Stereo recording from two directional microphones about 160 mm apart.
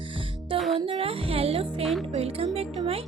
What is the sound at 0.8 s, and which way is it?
Speech, 35° right (ahead or behind).